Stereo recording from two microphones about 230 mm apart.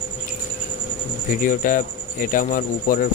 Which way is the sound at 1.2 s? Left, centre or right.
Left.